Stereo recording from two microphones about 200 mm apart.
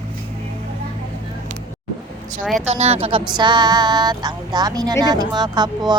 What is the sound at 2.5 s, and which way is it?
A woman's voice, 35° right (ahead or behind).